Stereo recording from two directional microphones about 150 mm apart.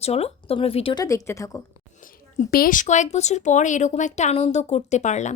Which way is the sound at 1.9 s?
60° left (ahead or behind).